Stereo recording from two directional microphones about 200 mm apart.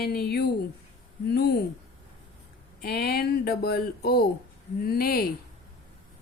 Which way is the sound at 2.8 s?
50° left (ahead or behind).